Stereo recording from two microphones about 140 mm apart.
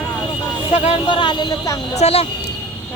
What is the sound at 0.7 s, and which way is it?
Speech, 45° left (ahead or behind).